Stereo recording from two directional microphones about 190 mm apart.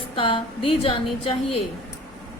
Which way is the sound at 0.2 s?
30° left (ahead or behind).